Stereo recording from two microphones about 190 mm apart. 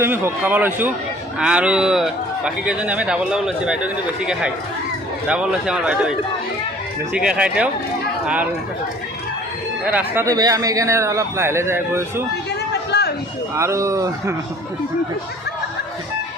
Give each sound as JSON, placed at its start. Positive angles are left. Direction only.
{"t": 0.0, "sound": "speech", "side_deg": -10}
{"t": 5.3, "sound": "speech", "side_deg": -5}
{"t": 7.1, "sound": "speech", "side_deg": -5}
{"t": 9.8, "sound": "speech", "side_deg": -10}
{"t": 12.9, "sound": "a sound", "side_deg": 60}
{"t": 13.6, "sound": "speech", "side_deg": -15}